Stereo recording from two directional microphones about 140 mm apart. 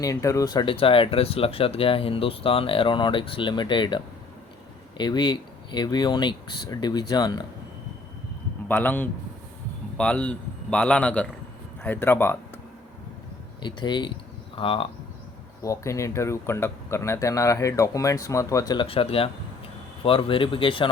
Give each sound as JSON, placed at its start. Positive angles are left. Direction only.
{"t": 0.0, "sound": "speech", "side_deg": 25}
{"t": 8.6, "sound": "a man's voice", "side_deg": 10}
{"t": 13.6, "sound": "speech", "side_deg": 35}
{"t": 15.6, "sound": "speech", "side_deg": 20}
{"t": 18.9, "sound": "speech", "side_deg": 40}